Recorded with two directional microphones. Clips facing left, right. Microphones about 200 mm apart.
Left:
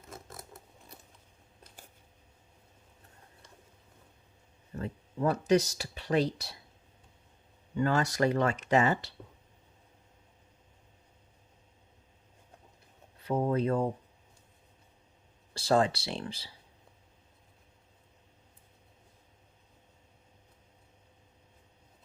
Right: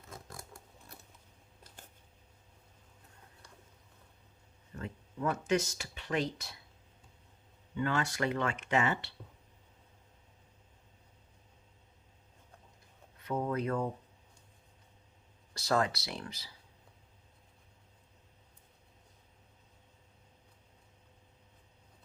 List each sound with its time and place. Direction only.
0.1 s scissors: 5° left (ahead or behind)
4.7 s speech: 35° left (ahead or behind)
7.8 s speech: 40° left (ahead or behind)
13.2 s speech: 30° left (ahead or behind)
15.5 s speech: 30° left (ahead or behind)